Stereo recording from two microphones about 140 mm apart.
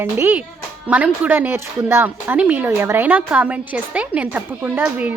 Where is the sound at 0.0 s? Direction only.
15° right (ahead or behind).